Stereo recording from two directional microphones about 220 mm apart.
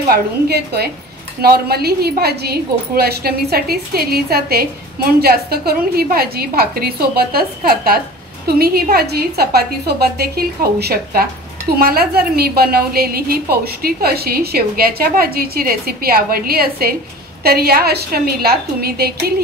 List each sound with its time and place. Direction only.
0.1 s a woman's voice: 45° right (ahead or behind)